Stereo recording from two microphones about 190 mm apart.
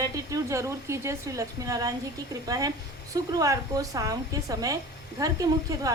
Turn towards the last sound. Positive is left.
turn(degrees=-20)  # may be behind; listen again after turning